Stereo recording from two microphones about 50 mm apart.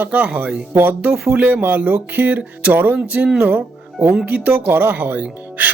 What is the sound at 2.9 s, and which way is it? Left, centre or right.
Speech, right.